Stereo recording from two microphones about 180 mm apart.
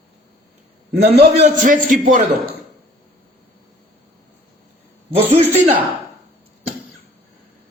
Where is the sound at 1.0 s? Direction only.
65° right (ahead or behind).